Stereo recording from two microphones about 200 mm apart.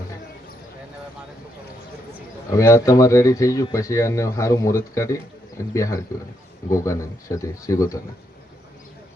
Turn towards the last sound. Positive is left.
turn(degrees=15)  # may be behind; listen again after turning